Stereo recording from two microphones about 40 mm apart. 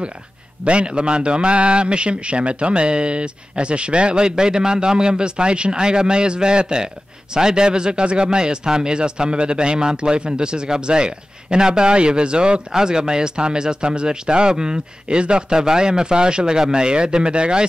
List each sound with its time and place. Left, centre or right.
0.7 s speech: right